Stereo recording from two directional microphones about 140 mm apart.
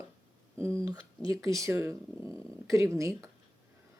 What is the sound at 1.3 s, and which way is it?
Speech, 25° right (ahead or behind).